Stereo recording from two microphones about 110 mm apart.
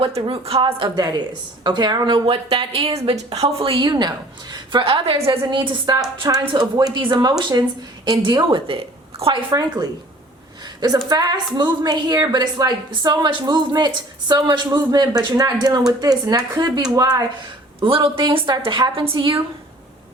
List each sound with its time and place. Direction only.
0.0 s a woman's voice: 55° right (ahead or behind)
5.3 s a woman's voice: 50° right (ahead or behind)
8.6 s a woman's voice: 55° right (ahead or behind)
9.5 s a woman's voice: 35° right (ahead or behind)
17.7 s speech: 55° right (ahead or behind)